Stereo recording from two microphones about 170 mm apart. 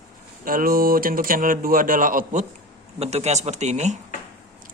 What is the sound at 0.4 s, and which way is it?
Speech, 55° right (ahead or behind).